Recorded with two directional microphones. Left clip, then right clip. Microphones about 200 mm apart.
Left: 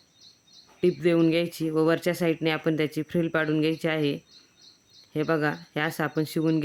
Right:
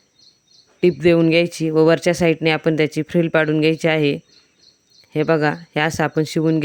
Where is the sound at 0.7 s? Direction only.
35° right (ahead or behind).